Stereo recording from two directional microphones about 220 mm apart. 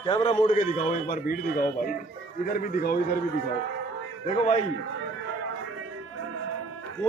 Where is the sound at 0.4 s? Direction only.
35° left (ahead or behind).